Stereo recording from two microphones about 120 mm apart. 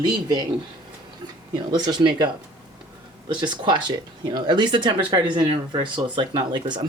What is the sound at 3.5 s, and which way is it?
Speech, 40° right (ahead or behind).